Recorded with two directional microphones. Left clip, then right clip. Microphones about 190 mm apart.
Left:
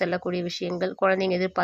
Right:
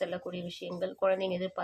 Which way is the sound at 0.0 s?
40° left (ahead or behind).